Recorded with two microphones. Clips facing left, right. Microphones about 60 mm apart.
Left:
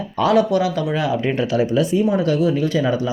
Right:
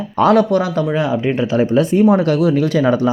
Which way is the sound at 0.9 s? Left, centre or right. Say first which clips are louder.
Right 3 dB; right.